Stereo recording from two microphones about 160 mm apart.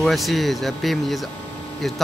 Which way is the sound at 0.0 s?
Centre (ahead or behind).